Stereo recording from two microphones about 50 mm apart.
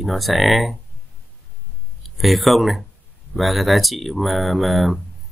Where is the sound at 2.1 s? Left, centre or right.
Centre.